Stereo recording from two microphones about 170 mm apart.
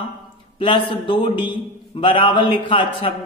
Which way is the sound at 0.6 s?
30° left (ahead or behind).